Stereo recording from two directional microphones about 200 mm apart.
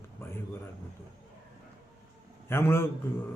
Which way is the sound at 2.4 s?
10° left (ahead or behind).